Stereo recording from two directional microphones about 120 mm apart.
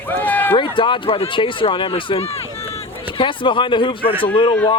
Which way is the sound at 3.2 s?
45° left (ahead or behind).